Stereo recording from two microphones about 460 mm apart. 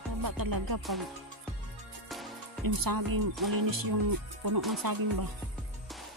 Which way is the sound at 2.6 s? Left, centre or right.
Right.